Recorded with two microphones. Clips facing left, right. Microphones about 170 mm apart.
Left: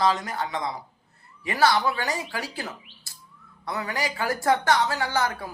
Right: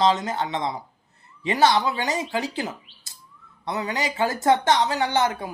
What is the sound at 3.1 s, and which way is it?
Bird, 20° right (ahead or behind).